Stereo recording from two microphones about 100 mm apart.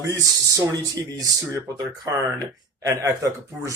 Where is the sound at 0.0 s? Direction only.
35° right (ahead or behind).